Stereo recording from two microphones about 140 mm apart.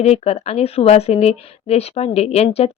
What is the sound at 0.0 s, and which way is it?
Speech, 50° left (ahead or behind).